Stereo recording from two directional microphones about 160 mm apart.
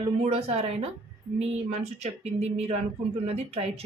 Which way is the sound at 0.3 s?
40° right (ahead or behind).